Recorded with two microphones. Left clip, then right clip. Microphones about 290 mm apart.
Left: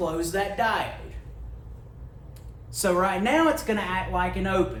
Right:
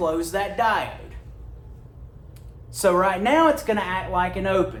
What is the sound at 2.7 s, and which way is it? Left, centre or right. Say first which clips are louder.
Speech: right 4 dB; right.